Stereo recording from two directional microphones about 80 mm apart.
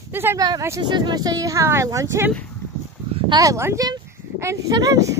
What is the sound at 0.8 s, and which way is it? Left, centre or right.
Speech, right.